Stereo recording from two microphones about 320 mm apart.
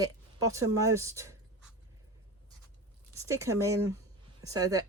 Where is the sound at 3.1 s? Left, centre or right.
Centre.